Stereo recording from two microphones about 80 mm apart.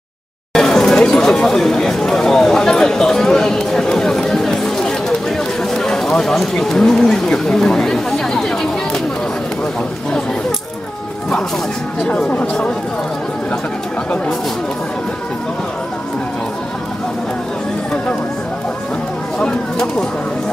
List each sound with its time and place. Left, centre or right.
0.5 s chatter: centre
5.8 s speech: centre
12.0 s speech: centre
19.4 s speech: centre